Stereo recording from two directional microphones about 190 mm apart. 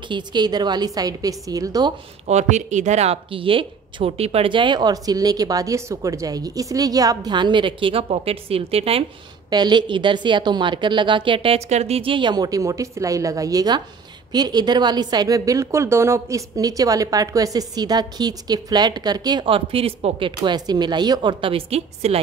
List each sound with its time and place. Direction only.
0.1 s a woman's voice: 20° right (ahead or behind)
2.2 s a woman's voice: 35° right (ahead or behind)